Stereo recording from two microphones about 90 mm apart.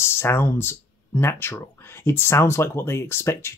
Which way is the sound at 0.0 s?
25° left (ahead or behind).